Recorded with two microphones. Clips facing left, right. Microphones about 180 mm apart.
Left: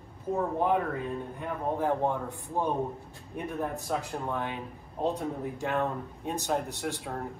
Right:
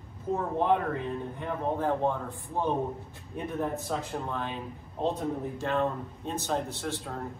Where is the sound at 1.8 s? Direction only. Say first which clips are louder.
Left 2 dB; 15° left (ahead or behind).